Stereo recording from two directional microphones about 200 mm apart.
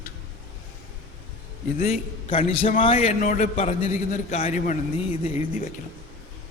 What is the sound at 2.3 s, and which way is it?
A man's voice, 30° left (ahead or behind).